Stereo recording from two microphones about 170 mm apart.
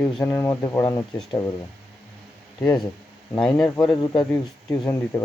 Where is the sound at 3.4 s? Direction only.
10° left (ahead or behind).